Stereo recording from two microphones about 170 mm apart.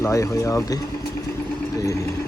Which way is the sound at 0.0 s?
15° left (ahead or behind).